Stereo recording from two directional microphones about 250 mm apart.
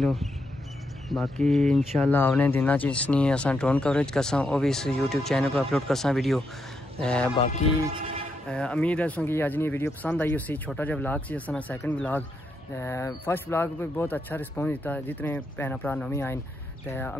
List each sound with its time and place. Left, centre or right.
0.0 s speech: centre
8.5 s speech: centre